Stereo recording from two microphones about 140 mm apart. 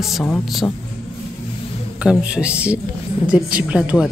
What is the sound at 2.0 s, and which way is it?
Speech, 10° right (ahead or behind).